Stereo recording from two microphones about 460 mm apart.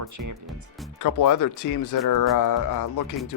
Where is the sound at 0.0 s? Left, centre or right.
Right.